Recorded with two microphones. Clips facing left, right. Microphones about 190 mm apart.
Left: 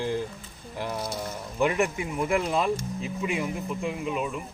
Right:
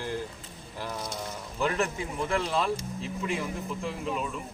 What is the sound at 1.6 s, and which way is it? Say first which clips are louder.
Speech: left 4 dB; 15° left (ahead or behind).